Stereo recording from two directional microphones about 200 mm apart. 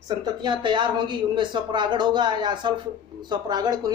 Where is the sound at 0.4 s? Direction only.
25° right (ahead or behind).